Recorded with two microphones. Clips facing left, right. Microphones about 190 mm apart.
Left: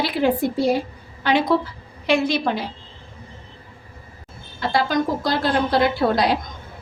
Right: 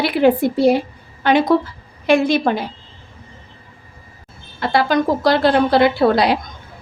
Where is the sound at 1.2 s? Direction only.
50° right (ahead or behind).